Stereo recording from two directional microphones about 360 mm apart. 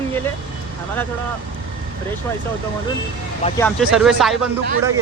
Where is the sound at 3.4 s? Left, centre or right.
Centre.